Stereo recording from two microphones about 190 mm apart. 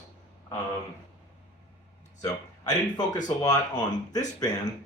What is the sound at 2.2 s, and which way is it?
A man's voice, 20° left (ahead or behind).